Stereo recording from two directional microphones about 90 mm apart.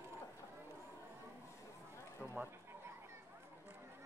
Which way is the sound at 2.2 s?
25° right (ahead or behind).